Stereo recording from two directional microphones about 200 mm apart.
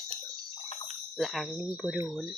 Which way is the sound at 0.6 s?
35° left (ahead or behind).